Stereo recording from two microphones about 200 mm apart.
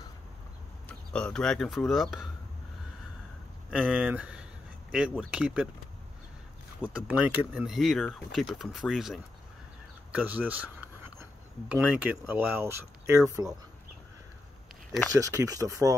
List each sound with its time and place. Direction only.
0.8 s speech: 5° left (ahead or behind)
3.7 s speech: 5° right (ahead or behind)
6.8 s speech: 5° right (ahead or behind)
10.1 s a sound: 10° right (ahead or behind)
11.7 s speech: 10° right (ahead or behind)
15.1 s speech: 15° right (ahead or behind)